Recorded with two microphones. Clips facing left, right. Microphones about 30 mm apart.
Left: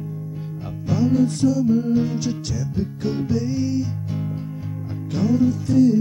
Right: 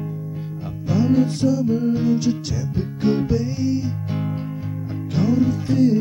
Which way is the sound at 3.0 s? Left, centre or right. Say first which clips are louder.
Right 5 dB; centre.